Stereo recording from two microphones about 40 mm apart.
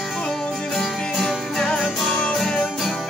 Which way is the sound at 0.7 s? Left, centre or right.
Centre.